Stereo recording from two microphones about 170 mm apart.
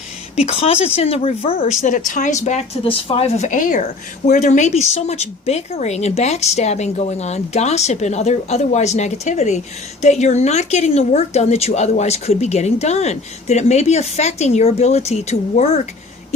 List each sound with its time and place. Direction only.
0.3 s a woman's voice: 35° left (ahead or behind)
1.8 s a woman's voice: 50° left (ahead or behind)